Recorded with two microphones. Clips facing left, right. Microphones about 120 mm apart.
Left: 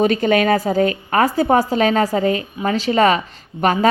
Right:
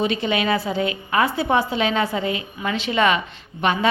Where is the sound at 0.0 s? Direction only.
45° left (ahead or behind).